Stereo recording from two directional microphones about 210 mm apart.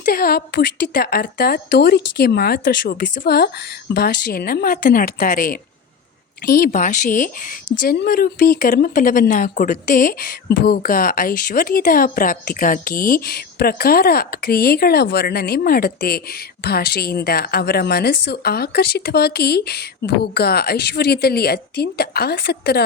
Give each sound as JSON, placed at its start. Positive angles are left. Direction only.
{"t": 0.0, "sound": "a woman's voice", "side_deg": 45}